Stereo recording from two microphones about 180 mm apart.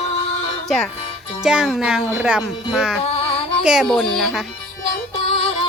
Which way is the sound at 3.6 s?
5° right (ahead or behind).